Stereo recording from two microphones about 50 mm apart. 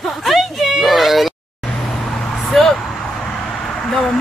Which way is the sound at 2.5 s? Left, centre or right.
Centre.